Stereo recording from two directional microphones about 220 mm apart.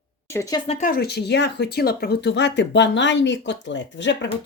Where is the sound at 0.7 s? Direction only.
35° left (ahead or behind).